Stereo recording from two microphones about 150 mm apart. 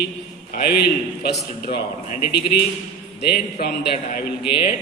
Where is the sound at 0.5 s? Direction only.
90° left.